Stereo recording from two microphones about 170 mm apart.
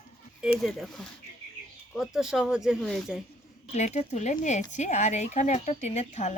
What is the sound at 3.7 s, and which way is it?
Speech, 45° left (ahead or behind).